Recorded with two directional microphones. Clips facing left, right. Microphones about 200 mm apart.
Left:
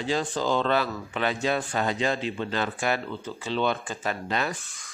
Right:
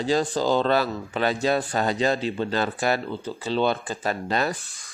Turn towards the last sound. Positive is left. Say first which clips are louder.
# right 4 dB
turn(degrees=-35)  # may be behind; listen again after turning